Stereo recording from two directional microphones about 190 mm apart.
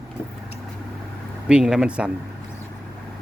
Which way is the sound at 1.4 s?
5° right (ahead or behind).